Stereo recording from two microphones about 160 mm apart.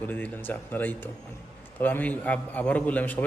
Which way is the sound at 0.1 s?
10° left (ahead or behind).